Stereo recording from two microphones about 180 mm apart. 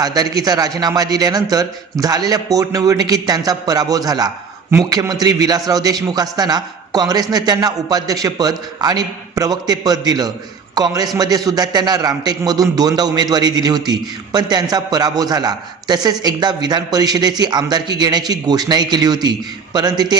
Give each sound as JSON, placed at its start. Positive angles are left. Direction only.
{"t": 0.0, "sound": "a man's voice", "side_deg": -20}